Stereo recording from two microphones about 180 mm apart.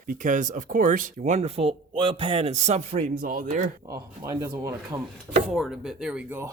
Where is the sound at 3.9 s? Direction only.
20° right (ahead or behind).